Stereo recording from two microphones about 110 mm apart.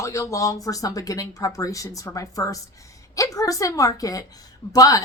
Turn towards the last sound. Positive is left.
turn(degrees=30)  # may be behind; listen again after turning